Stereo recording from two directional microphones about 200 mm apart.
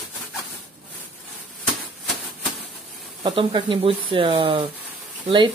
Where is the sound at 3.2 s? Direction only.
25° right (ahead or behind).